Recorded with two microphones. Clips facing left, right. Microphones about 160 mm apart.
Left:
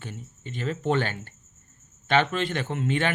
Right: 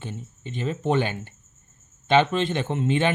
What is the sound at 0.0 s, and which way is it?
Speech, 20° right (ahead or behind).